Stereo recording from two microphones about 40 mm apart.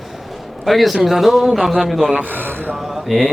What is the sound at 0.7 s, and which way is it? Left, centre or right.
A man's voice, centre.